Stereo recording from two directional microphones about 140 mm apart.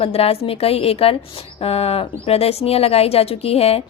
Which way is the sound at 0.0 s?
45° left (ahead or behind).